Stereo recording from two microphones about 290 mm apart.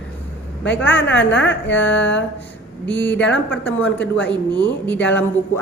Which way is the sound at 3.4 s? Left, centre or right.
Centre.